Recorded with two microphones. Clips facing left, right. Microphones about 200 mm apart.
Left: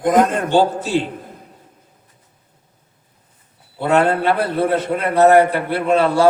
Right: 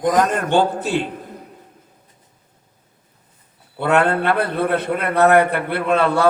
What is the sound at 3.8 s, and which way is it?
A man's voice, 60° right (ahead or behind).